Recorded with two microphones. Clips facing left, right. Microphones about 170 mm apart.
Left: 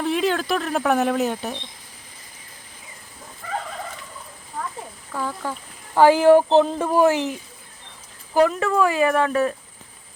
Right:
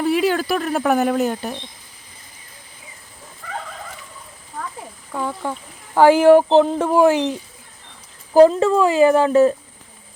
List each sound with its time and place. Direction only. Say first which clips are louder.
0.0 s speech: right 4 dB; 5° right (ahead or behind)
5.1 s speech: right 3 dB; 15° right (ahead or behind)
8.3 s speech: right 7 dB; 30° right (ahead or behind)